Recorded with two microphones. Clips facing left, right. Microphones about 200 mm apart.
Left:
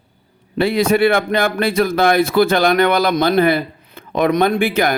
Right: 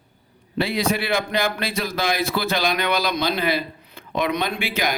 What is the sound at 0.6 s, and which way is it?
Speech, 55° left (ahead or behind).